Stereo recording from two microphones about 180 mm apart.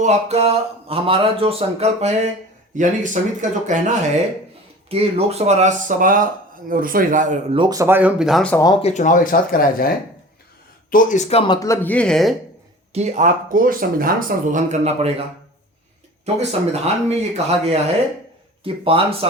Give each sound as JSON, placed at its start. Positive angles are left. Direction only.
{"t": 0.0, "sound": "speech", "side_deg": -40}
{"t": 7.5, "sound": "speech", "side_deg": -25}
{"t": 8.5, "sound": "speech", "side_deg": 20}
{"t": 8.8, "sound": "speech", "side_deg": 40}
{"t": 10.9, "sound": "speech", "side_deg": 40}
{"t": 12.9, "sound": "speech", "side_deg": -40}
{"t": 16.2, "sound": "speech", "side_deg": -35}